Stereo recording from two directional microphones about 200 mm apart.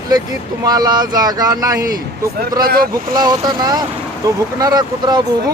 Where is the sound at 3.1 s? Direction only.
20° right (ahead or behind).